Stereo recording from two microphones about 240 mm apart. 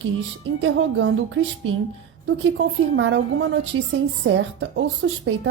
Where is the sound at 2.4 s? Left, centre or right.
Right.